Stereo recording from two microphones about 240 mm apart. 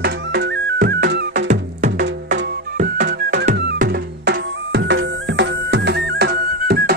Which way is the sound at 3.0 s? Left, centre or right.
Right.